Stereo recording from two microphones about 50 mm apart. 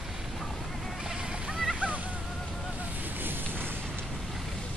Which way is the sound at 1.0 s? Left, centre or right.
Centre.